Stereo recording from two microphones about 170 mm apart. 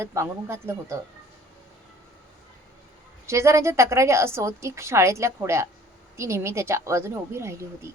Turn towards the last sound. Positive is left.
turn(degrees=-15)  # may be behind; listen again after turning